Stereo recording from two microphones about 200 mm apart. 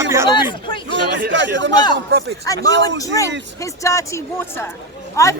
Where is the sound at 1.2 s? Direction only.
65° right (ahead or behind).